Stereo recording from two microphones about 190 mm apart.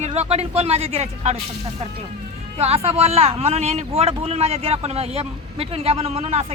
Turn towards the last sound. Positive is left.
turn(degrees=-35)  # may be behind; listen again after turning